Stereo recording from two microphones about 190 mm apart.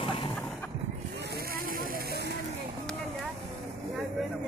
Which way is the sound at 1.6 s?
50° right (ahead or behind).